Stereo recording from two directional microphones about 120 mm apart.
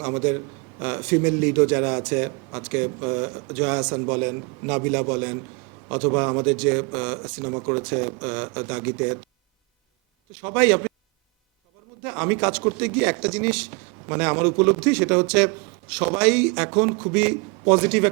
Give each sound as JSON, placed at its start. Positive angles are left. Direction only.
{"t": 0.0, "sound": "a man's voice", "side_deg": -20}
{"t": 10.4, "sound": "a man's voice", "side_deg": -15}
{"t": 12.0, "sound": "a man's voice", "side_deg": -15}